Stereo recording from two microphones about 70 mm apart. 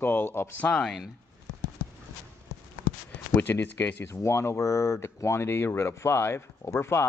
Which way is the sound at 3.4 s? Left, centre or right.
Left.